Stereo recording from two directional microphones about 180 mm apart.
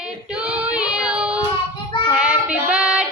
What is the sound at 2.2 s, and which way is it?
Music, 5° right (ahead or behind).